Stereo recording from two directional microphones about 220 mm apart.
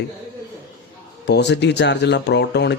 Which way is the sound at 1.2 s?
50° left (ahead or behind).